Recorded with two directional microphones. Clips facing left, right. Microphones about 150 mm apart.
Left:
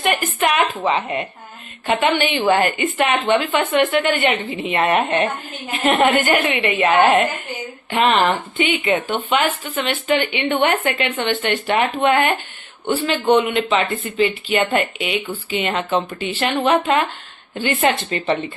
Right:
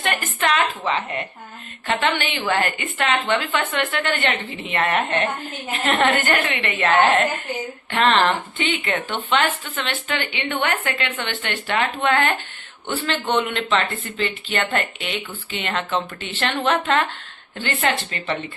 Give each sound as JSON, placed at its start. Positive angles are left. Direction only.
{"t": 0.0, "sound": "a woman's voice", "side_deg": 10}